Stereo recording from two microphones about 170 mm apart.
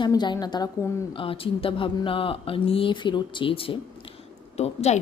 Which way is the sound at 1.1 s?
30° left (ahead or behind).